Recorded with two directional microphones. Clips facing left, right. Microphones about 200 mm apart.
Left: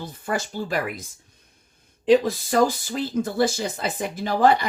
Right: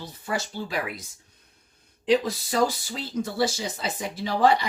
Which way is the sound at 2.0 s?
50° left (ahead or behind).